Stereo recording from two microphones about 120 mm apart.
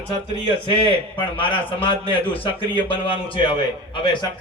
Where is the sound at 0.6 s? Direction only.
50° left (ahead or behind).